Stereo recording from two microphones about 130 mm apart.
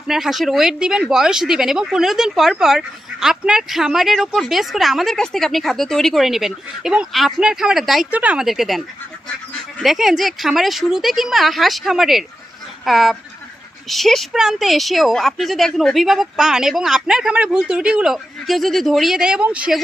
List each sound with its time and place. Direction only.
0.1 s speech: centre (ahead or behind)